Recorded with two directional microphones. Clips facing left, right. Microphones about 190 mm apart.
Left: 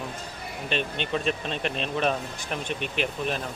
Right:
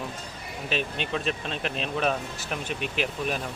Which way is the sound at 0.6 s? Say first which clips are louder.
Left 1 dB; 5° right (ahead or behind).